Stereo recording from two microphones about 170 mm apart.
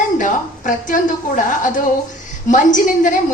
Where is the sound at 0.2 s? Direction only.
50° left (ahead or behind).